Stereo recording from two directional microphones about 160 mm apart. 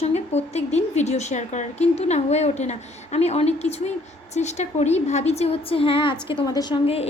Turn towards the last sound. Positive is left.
turn(degrees=35)  # may be behind; listen again after turning